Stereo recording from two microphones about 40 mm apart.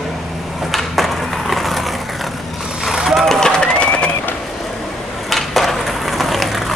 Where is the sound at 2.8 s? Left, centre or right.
Centre.